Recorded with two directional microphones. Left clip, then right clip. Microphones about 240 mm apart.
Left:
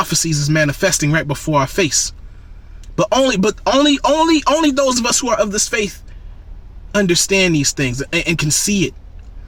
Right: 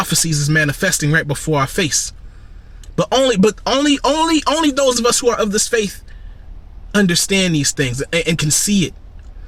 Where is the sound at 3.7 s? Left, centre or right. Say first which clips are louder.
Left 6 dB; centre.